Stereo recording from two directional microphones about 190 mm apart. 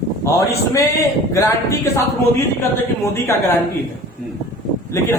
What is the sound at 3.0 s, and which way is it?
Speech, 15° left (ahead or behind).